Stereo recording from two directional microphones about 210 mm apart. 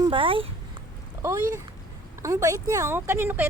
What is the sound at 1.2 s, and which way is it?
Speech, 15° right (ahead or behind).